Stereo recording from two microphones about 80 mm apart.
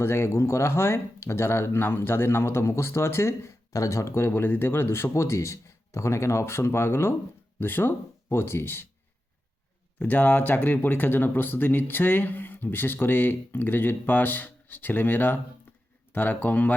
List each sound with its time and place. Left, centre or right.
0.0 s speech: left
10.0 s speech: left